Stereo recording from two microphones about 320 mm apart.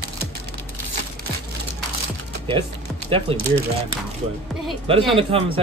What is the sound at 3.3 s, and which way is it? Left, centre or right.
Speech, right.